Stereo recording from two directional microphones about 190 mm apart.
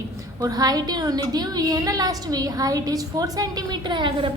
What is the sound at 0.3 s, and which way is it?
A woman's voice, 20° right (ahead or behind).